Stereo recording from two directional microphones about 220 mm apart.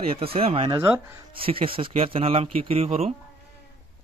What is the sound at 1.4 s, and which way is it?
Speech, 25° right (ahead or behind).